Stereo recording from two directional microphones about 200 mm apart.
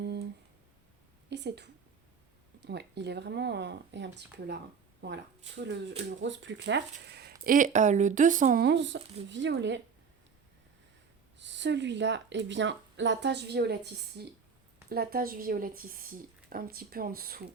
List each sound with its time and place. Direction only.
0.0 s a sound: 55° right (ahead or behind)
1.3 s a woman's voice: 60° right (ahead or behind)
7.1 s speech: 55° right (ahead or behind)
8.6 s speech: 60° right (ahead or behind)
11.3 s speech: 60° right (ahead or behind)